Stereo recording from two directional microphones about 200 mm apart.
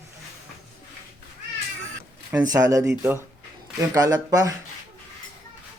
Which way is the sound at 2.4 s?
15° right (ahead or behind).